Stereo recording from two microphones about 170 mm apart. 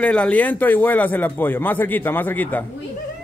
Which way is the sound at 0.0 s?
5° left (ahead or behind).